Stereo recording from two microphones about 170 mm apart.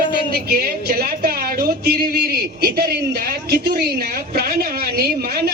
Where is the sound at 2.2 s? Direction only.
70° right (ahead or behind).